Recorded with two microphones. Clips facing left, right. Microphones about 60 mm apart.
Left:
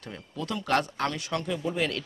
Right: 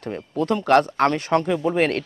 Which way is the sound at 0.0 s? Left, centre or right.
Right.